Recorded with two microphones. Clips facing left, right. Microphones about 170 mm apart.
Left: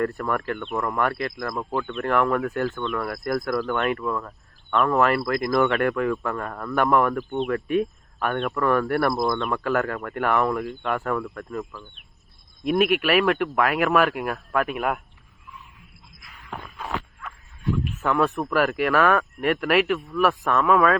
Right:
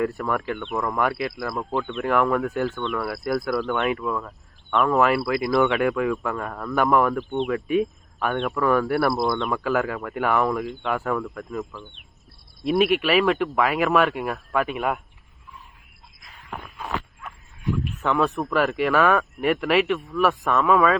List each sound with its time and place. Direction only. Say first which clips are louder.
0.0 s speech: even; centre (ahead or behind)
17.2 s dog: even; 15° right (ahead or behind)
17.8 s speech: even; centre (ahead or behind)